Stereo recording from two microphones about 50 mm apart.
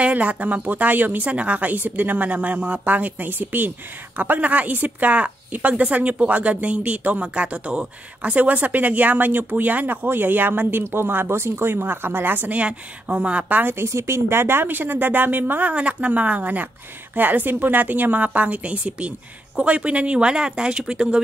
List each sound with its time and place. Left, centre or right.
0.0 s a woman's voice: right
12.6 s a woman's voice: right
13.7 s a woman's voice: right
15.6 s a woman's voice: right